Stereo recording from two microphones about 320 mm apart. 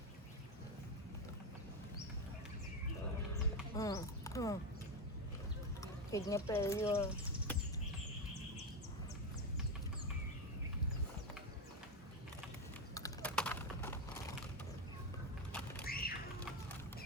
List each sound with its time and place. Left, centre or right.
3.8 s speech: centre
5.8 s speech: centre
12.9 s typing: centre
15.8 s a sound: left